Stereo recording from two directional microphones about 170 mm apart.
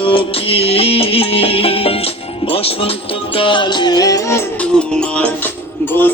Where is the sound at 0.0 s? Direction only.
30° left (ahead or behind); by 4.7 s 15° left (ahead or behind).